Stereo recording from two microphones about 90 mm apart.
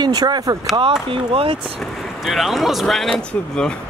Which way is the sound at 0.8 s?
80° right.